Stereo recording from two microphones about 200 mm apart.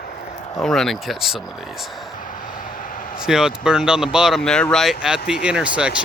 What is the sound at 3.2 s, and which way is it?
Speech, 5° right (ahead or behind).